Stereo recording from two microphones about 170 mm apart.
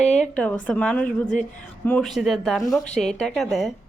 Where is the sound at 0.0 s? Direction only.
40° left (ahead or behind).